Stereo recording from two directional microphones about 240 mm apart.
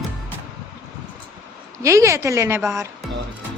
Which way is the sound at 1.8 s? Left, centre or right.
Centre.